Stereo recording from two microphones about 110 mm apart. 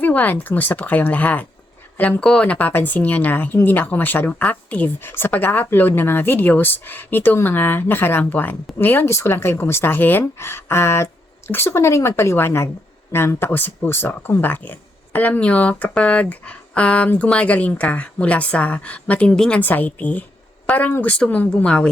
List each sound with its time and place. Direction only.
0.0 s speech: 15° left (ahead or behind)